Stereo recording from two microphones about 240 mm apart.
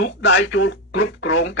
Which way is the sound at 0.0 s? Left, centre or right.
Left.